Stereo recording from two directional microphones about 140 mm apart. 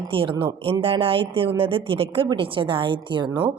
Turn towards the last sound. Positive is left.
turn(degrees=-35)  # may be behind; listen again after turning